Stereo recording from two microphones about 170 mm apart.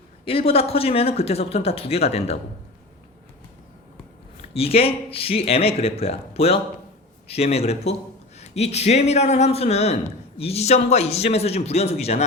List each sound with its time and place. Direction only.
0.3 s a man's voice: 35° left (ahead or behind)
4.5 s a man's voice: 35° left (ahead or behind)